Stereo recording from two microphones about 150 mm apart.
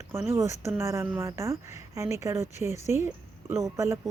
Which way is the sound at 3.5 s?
20° right (ahead or behind).